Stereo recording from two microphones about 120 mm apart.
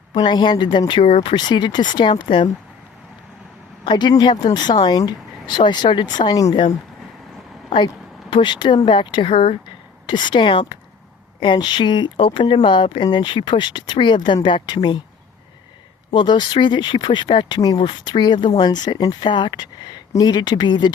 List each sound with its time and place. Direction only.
0.1 s speech: 40° left (ahead or behind)
1.0 s speech: 50° left (ahead or behind)
3.8 s speech: 35° left (ahead or behind)
8.3 s speech: 40° left (ahead or behind)
16.1 s speech: 40° left (ahead or behind)